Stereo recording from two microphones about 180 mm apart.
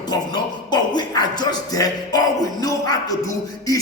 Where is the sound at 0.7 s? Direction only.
25° left (ahead or behind).